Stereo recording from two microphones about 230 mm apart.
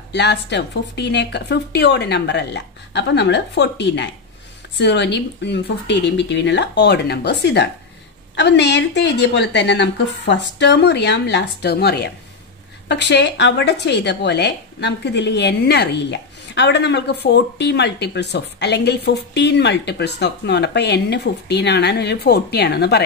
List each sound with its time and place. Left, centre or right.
0.1 s a woman's voice: left